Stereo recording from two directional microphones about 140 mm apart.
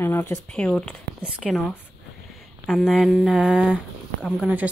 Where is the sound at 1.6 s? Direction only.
15° left (ahead or behind).